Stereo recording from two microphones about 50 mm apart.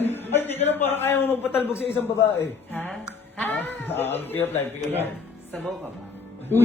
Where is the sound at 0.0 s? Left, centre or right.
Left.